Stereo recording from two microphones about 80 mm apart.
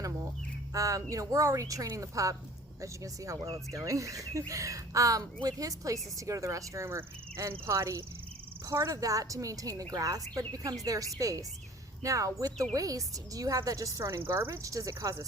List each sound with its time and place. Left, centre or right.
0.7 s speech: right